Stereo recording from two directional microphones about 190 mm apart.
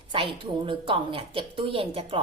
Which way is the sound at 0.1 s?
25° right (ahead or behind).